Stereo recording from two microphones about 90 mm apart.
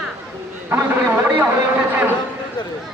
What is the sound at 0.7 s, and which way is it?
A man's voice, 20° right (ahead or behind).